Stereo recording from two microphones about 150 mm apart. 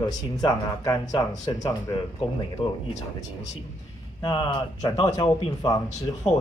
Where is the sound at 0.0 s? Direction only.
25° left (ahead or behind).